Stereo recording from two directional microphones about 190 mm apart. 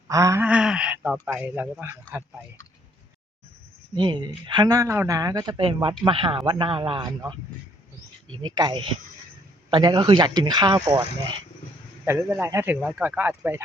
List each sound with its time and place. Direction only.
0.1 s a sound: 15° right (ahead or behind)
1.2 s speech: 10° right (ahead or behind)
3.9 s speech: 25° right (ahead or behind)
8.5 s speech: 25° right (ahead or behind)
12.0 s speech: 15° right (ahead or behind)